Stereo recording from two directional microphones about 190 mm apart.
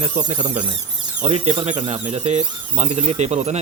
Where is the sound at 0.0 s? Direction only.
40° right (ahead or behind).